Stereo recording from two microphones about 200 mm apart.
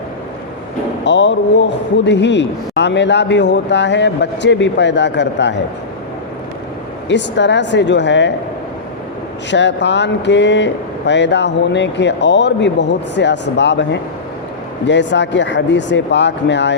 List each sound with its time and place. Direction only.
1.0 s speech: 65° left (ahead or behind)
7.1 s speech: 60° left (ahead or behind)
9.5 s speech: 60° left (ahead or behind)